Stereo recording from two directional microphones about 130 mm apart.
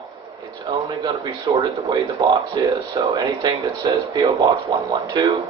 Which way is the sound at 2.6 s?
35° right (ahead or behind).